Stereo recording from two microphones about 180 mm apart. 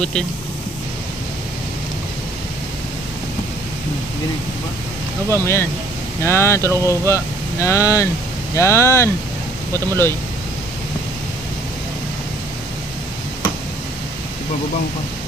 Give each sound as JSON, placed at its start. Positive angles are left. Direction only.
{"t": 5.4, "sound": "speech", "side_deg": 15}